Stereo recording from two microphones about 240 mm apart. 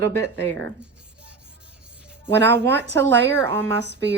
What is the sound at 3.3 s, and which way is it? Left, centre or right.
Speech, centre.